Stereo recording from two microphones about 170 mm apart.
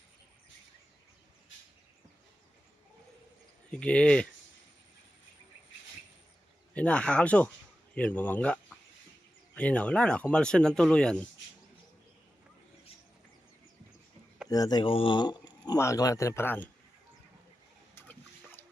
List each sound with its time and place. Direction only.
3.7 s speech: 5° left (ahead or behind)
6.7 s speech: 5° left (ahead or behind)
9.6 s speech: 10° left (ahead or behind)
14.4 s speech: 20° left (ahead or behind)
17.9 s splash: 15° left (ahead or behind)